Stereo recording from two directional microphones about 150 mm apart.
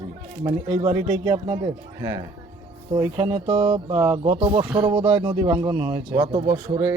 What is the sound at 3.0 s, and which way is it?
Speech, 25° right (ahead or behind).